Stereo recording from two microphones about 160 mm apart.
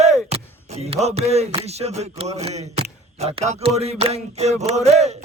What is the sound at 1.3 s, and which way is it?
Speech, 40° right (ahead or behind).